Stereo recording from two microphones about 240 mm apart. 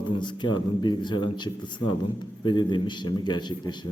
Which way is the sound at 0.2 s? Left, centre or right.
Centre.